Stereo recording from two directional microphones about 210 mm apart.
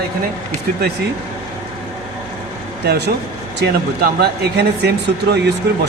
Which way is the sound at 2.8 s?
50° right (ahead or behind).